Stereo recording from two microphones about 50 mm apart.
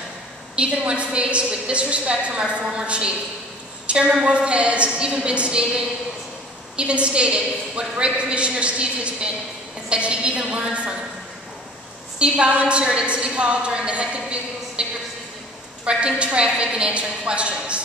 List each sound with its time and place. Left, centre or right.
0.6 s a woman's voice: right
12.2 s a woman's voice: right